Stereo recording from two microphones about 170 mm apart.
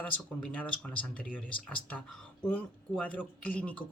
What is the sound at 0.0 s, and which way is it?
Speech, 10° left (ahead or behind).